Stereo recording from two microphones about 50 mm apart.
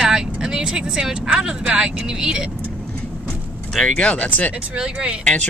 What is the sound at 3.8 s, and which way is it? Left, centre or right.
Speech, left.